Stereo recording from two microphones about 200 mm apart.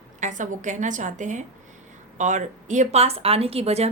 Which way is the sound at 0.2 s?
40° right (ahead or behind).